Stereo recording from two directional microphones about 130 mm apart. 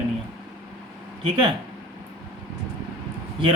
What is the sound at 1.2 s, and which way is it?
Speech, 40° right (ahead or behind).